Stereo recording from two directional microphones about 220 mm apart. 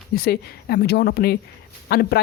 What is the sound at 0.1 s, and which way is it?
Speech, 45° left (ahead or behind).